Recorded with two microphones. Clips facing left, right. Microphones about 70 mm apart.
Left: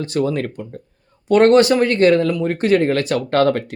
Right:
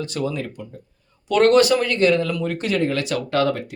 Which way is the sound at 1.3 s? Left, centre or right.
Left.